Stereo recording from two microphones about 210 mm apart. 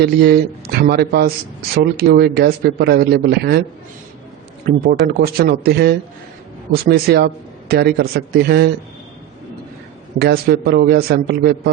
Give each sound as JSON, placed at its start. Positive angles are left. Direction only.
{"t": 0.0, "sound": "speech", "side_deg": -50}
{"t": 4.6, "sound": "speech", "side_deg": -45}
{"t": 10.2, "sound": "speech", "side_deg": -50}